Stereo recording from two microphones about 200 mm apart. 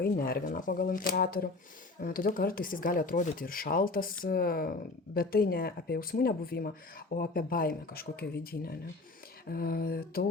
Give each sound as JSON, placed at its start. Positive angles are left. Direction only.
{"t": 0.0, "sound": "speech", "side_deg": 50}